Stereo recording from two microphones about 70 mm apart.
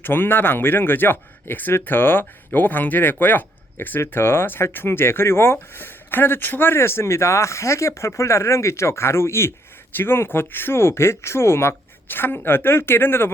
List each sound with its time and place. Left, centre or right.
0.0 s speech: left